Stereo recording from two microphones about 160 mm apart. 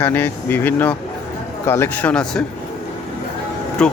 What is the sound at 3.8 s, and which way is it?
Speech, 5° left (ahead or behind).